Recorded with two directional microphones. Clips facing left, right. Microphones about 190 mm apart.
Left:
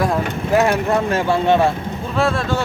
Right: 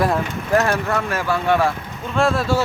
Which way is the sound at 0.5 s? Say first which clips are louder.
Left 3 dB; 15° left (ahead or behind).